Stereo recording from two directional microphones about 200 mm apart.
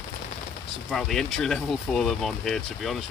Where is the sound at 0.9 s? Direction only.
Centre (ahead or behind).